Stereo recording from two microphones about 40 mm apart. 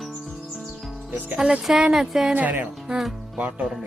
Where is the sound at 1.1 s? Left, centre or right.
Right.